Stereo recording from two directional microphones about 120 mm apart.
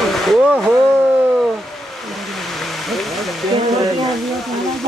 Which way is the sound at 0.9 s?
15° right (ahead or behind).